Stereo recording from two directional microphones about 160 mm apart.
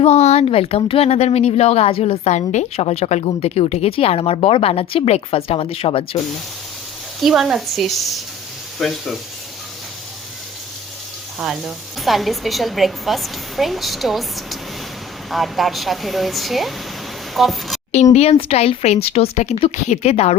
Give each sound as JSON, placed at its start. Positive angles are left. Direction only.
{"t": 0.0, "sound": "speech", "side_deg": 45}
{"t": 7.2, "sound": "a woman's voice", "side_deg": 0}
{"t": 11.3, "sound": "a woman's voice", "side_deg": 0}
{"t": 17.9, "sound": "speech", "side_deg": 45}